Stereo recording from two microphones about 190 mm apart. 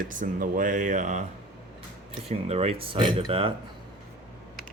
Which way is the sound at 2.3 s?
35° right (ahead or behind).